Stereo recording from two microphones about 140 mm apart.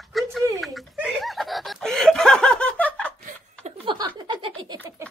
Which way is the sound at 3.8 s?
35° right (ahead or behind).